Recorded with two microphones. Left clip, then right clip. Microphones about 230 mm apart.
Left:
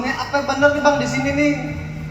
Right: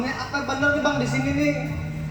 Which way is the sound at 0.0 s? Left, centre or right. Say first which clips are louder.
Left 6 dB; left.